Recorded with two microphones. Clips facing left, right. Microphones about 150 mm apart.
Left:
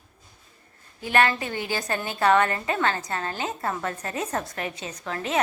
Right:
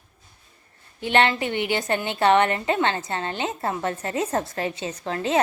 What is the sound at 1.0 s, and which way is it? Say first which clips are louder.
A woman's voice: right 2 dB; 25° right (ahead or behind).